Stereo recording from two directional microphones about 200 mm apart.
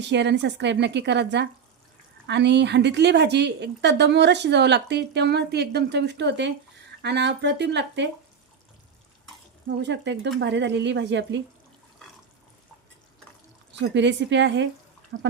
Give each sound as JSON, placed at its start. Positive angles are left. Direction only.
{"t": 0.1, "sound": "a woman's voice", "side_deg": -60}
{"t": 9.6, "sound": "a woman's voice", "side_deg": -60}
{"t": 13.7, "sound": "a woman's voice", "side_deg": -60}